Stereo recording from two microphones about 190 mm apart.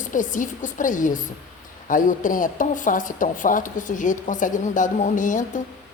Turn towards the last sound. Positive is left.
turn(degrees=40)  # may be behind; listen again after turning